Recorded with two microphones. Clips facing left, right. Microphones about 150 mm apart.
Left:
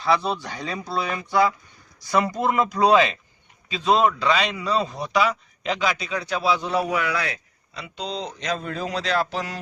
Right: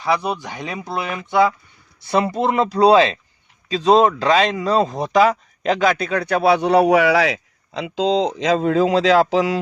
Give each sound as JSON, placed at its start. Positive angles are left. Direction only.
{"t": 0.0, "sound": "speech", "side_deg": -15}